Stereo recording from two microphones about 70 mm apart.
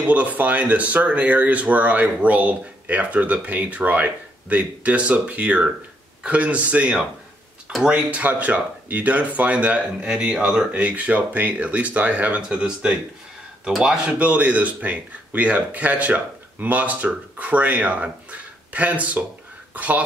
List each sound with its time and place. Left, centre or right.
0.0 s speech: right